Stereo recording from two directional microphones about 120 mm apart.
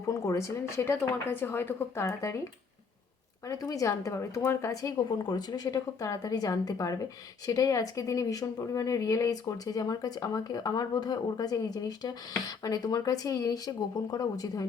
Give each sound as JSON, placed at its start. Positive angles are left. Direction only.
{"t": 0.1, "sound": "speech", "side_deg": 25}
{"t": 3.4, "sound": "speech", "side_deg": 30}